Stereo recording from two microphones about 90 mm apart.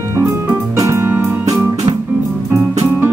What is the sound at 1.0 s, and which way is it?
Keyboard, 25° right (ahead or behind).